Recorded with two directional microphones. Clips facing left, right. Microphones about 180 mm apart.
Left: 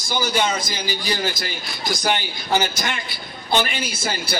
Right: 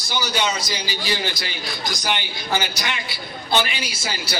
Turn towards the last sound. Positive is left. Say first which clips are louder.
# left 3 dB
turn(degrees=50)  # may be behind; listen again after turning